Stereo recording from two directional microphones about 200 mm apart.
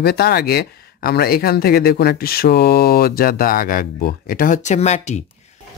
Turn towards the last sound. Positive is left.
turn(degrees=35)  # may be behind; listen again after turning